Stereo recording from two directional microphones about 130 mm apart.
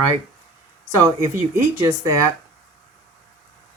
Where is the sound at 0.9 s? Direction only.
25° right (ahead or behind).